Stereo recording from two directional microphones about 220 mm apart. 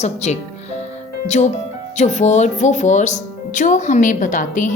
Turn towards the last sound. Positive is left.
turn(degrees=35)  # may be behind; listen again after turning